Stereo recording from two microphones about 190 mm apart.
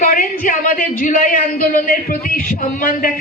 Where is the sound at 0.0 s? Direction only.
45° left (ahead or behind).